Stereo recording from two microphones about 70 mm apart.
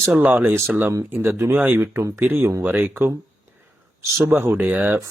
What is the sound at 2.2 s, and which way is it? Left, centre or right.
Speech, right.